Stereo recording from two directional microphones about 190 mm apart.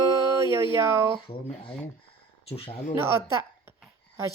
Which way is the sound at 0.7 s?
15° right (ahead or behind).